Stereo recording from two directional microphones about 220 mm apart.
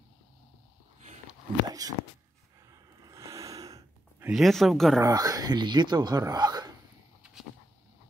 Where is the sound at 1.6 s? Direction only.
15° right (ahead or behind).